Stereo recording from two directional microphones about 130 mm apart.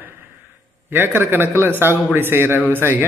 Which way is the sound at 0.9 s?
15° right (ahead or behind).